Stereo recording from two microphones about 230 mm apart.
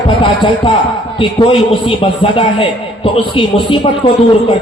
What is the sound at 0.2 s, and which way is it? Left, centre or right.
Speech, left.